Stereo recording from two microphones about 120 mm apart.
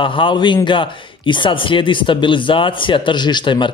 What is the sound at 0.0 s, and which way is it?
Speech, 45° left (ahead or behind).